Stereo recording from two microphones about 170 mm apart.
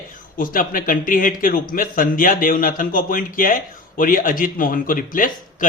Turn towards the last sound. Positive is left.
turn(degrees=50)  # may be behind; listen again after turning